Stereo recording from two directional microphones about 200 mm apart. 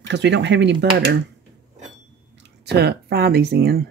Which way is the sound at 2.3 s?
55° right (ahead or behind).